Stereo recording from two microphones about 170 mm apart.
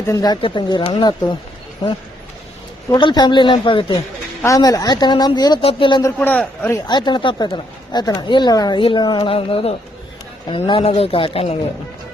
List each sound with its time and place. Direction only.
0.1 s speech: 20° left (ahead or behind)
2.9 s speech: 25° left (ahead or behind)
6.1 s a man's voice: 10° left (ahead or behind)
6.8 s speech: 25° left (ahead or behind)